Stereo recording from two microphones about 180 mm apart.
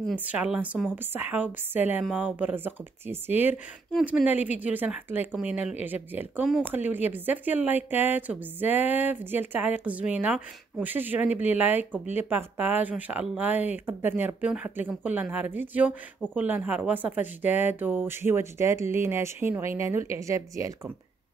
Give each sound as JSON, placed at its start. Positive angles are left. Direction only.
{"t": 0.2, "sound": "speech", "side_deg": -10}